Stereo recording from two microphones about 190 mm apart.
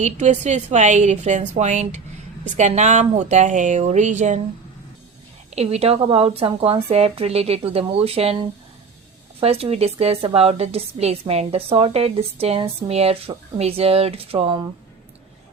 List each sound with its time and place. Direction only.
0.0 s a woman's voice: 40° right (ahead or behind)
5.5 s a woman's voice: 30° right (ahead or behind)